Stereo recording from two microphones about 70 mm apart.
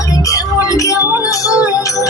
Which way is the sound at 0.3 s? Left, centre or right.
Left.